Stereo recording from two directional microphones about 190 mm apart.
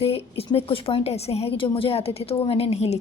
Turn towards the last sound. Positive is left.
turn(degrees=35)  # may be behind; listen again after turning